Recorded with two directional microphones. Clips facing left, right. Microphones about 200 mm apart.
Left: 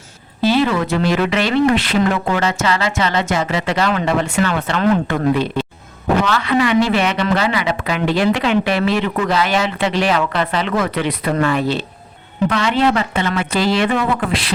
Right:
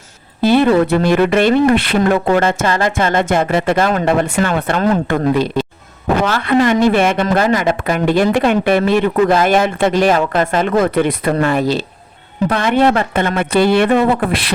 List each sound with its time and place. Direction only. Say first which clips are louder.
0.4 s a sound: right 3 dB; 55° right (ahead or behind)
0.9 s speech: right 4 dB; 55° right (ahead or behind)
4.4 s a woman's voice: right 2 dB; 40° right (ahead or behind)
4.6 s a woman's voice: right 1 dB; 50° right (ahead or behind)
12.5 s speech: right 3 dB; 50° right (ahead or behind)